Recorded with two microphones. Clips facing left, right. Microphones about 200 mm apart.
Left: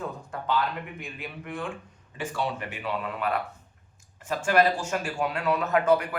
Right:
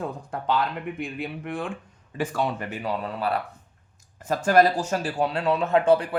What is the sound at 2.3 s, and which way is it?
A man's voice, 40° right (ahead or behind).